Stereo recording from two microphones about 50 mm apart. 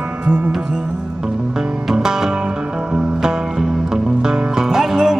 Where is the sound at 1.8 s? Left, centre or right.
Centre.